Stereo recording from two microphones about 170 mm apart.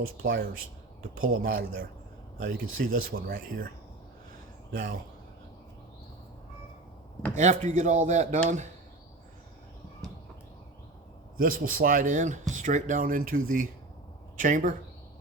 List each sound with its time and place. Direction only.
0.2 s speech: 60° right (ahead or behind)
4.7 s speech: 60° right (ahead or behind)
7.3 s speech: 45° right (ahead or behind)
11.3 s speech: 55° right (ahead or behind)